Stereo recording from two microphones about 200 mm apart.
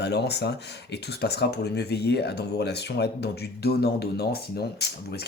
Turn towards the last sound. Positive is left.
turn(degrees=55)  # may be behind; listen again after turning